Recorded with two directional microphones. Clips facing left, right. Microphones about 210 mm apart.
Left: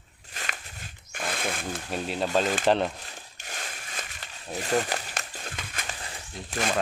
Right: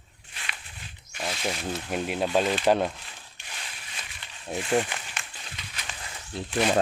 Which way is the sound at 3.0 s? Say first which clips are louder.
Left 4 dB; 45° left (ahead or behind).